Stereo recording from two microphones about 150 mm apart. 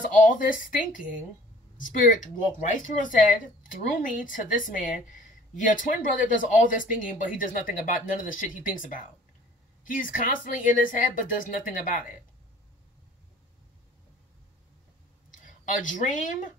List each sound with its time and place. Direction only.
0.0 s speech: 60° left (ahead or behind)
15.3 s speech: 60° left (ahead or behind)